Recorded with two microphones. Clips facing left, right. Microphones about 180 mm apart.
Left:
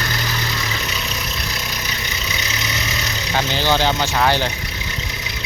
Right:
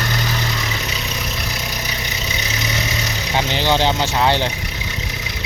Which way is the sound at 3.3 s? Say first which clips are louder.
Right 1 dB; 20° right (ahead or behind).